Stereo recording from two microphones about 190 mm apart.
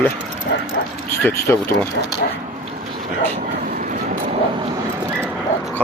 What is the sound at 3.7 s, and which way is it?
Train, 45° right (ahead or behind).